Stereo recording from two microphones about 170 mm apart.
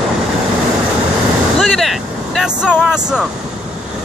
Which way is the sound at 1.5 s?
Centre (ahead or behind).